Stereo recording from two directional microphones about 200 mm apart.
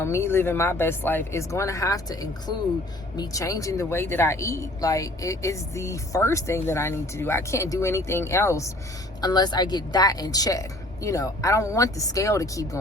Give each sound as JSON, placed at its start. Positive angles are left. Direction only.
{"t": 0.0, "sound": "speech", "side_deg": 15}